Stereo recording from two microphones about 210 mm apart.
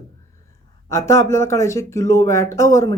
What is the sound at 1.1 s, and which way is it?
Speech, 15° left (ahead or behind).